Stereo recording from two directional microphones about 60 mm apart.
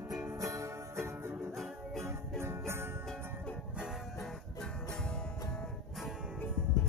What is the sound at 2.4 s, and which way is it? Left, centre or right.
Music, right.